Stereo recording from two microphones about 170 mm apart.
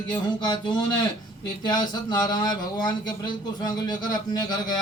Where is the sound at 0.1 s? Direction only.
25° left (ahead or behind).